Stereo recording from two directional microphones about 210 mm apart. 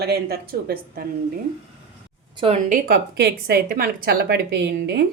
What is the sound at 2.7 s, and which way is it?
A woman's voice, 50° right (ahead or behind).